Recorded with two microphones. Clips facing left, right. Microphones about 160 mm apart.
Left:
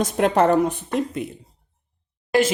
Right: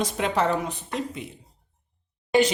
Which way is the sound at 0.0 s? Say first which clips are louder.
Left 6 dB; 50° left (ahead or behind).